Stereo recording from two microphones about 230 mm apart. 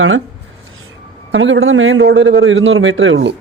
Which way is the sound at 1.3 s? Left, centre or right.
Right.